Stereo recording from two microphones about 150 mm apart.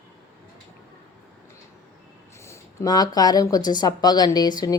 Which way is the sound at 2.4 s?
20° left (ahead or behind).